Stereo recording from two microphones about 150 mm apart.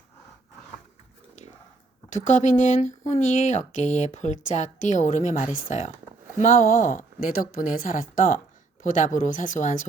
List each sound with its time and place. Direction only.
2.1 s a woman's voice: 55° left (ahead or behind)